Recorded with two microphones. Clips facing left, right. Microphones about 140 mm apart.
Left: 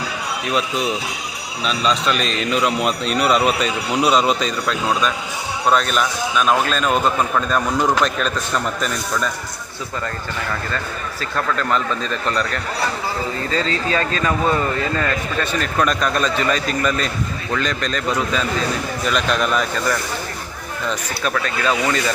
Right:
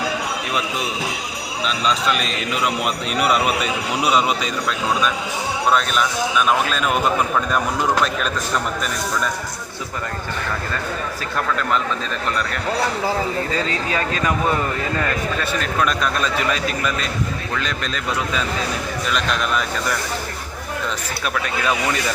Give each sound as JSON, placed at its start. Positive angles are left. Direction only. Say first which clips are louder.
{"t": 1.6, "sound": "a man's voice", "louder": "left 1 dB", "side_deg": 0}
{"t": 5.7, "sound": "a man's voice", "louder": "left 3 dB", "side_deg": 0}
{"t": 13.5, "sound": "a man's voice", "louder": "left 2 dB", "side_deg": -10}
{"t": 21.2, "sound": "a man's voice", "louder": "left 2 dB", "side_deg": -10}